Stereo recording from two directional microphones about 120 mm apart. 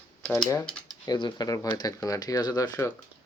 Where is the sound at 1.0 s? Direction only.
35° left (ahead or behind).